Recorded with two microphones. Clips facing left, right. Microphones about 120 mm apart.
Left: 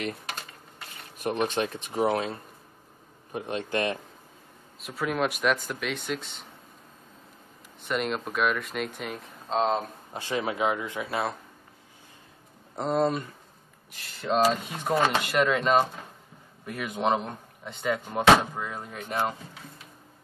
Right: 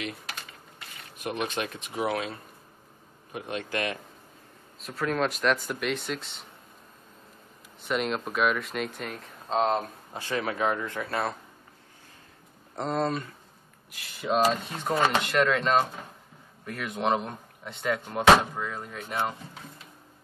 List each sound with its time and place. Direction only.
1.2 s speech: 35° left (ahead or behind)
4.7 s speech: 5° left (ahead or behind)
7.8 s speech: centre (ahead or behind)
10.1 s speech: 20° left (ahead or behind)
12.7 s speech: 5° left (ahead or behind)
13.9 s speech: 5° right (ahead or behind)